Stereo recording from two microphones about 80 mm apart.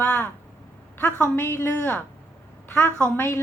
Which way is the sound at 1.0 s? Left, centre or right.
Left.